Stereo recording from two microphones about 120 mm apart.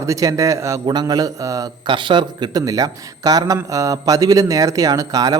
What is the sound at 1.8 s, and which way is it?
A man's voice, 40° right (ahead or behind).